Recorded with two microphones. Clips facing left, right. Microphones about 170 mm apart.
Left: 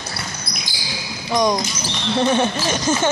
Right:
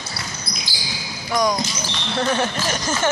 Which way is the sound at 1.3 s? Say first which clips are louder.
Left 2 dB; 20° left (ahead or behind).